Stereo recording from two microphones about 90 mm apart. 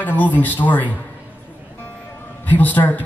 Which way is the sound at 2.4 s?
20° left (ahead or behind).